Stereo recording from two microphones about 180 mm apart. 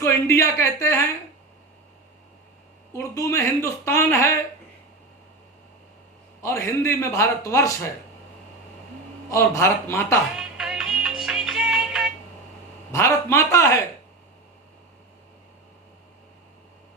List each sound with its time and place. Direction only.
0.0 s a woman's voice: 15° left (ahead or behind)
2.9 s a woman's voice: 15° left (ahead or behind)
6.4 s a woman's voice: 15° left (ahead or behind)
9.3 s a woman's voice: 15° left (ahead or behind)
10.3 s music: 5° right (ahead or behind)
12.9 s a woman's voice: 15° left (ahead or behind)